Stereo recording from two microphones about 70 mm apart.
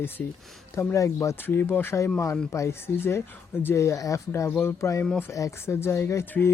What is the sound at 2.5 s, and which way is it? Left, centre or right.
Speech, left.